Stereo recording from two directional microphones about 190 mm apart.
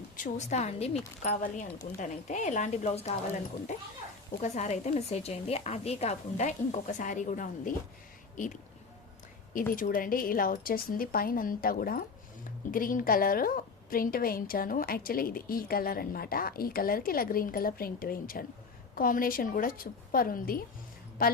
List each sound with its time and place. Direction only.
0.2 s a woman's voice: 40° left (ahead or behind)
4.4 s a woman's voice: 40° left (ahead or behind)
9.7 s a woman's voice: 45° left (ahead or behind)